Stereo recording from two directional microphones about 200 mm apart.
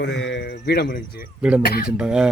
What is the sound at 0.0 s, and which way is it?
Speech, 65° left (ahead or behind).